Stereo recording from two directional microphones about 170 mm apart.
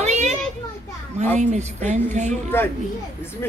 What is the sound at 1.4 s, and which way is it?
A woman's voice, 45° right (ahead or behind).